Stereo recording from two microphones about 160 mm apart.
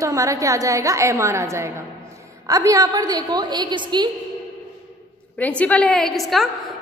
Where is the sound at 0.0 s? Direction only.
20° right (ahead or behind).